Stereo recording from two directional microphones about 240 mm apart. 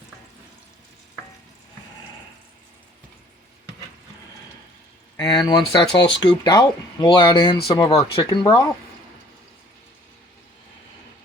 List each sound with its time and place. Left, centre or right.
5.1 s speech: centre